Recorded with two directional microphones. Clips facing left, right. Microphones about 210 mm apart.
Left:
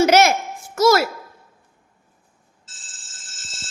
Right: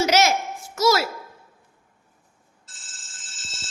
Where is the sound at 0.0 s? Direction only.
55° left (ahead or behind).